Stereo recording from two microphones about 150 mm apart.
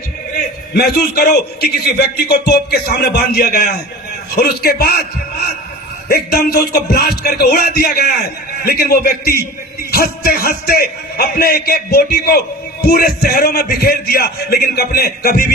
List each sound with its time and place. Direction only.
0.7 s a man's voice: 90° left
6.1 s a man's voice: 90° left